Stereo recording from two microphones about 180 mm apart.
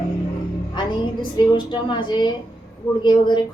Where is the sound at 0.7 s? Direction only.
25° left (ahead or behind).